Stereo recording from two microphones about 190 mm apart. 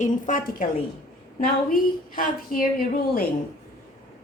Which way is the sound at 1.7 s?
50° left (ahead or behind).